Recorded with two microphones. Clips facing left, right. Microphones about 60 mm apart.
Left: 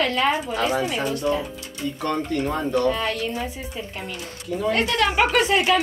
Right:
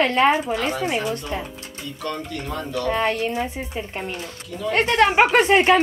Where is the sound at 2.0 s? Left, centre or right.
Left.